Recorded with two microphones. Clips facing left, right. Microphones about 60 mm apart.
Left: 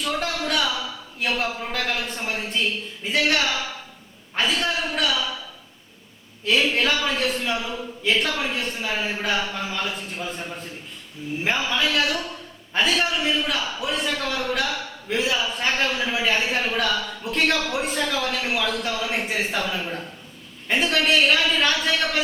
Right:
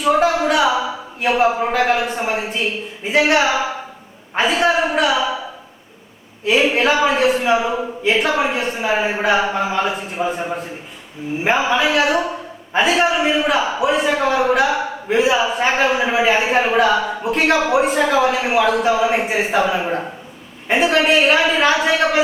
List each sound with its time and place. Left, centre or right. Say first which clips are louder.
0.0 s a sound: right 11 dB; centre
1.2 s a man's voice: right 9 dB; centre
1.5 s a man's voice: right 11 dB; right